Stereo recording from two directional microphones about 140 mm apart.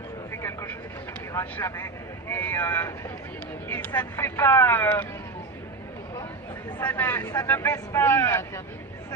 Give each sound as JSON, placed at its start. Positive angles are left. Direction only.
{"t": 0.3, "sound": "vehicle", "side_deg": 20}
{"t": 1.3, "sound": "speech", "side_deg": 20}
{"t": 6.8, "sound": "speech", "side_deg": 10}